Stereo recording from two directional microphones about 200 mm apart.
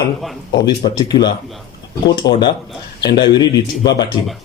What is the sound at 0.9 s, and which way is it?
Speech, 20° left (ahead or behind).